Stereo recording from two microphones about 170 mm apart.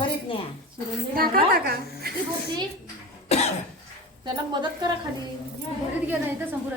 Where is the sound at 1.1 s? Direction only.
60° right (ahead or behind).